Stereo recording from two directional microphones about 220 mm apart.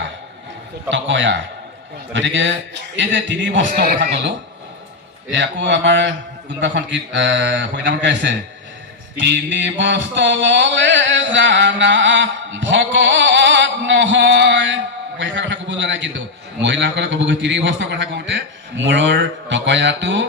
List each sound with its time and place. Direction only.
0.9 s a man's voice: 55° right (ahead or behind)
3.7 s a man's voice: 40° right (ahead or behind)
5.3 s a man's voice: 55° right (ahead or behind)
9.1 s a sound: 55° right (ahead or behind)
15.2 s a man's voice: 55° right (ahead or behind)